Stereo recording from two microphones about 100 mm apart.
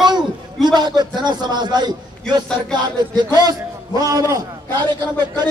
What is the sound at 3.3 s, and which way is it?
A man's voice, 40° right (ahead or behind).